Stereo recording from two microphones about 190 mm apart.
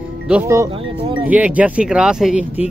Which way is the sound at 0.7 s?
30° right (ahead or behind).